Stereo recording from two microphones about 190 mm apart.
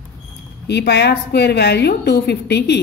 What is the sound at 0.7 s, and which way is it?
A woman's voice, 60° left (ahead or behind).